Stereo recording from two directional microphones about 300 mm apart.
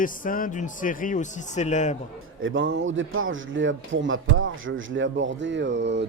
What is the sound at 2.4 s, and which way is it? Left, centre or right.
A man's voice, right.